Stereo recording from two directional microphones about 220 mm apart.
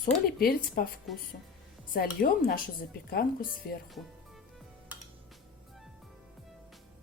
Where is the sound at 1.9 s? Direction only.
40° left (ahead or behind).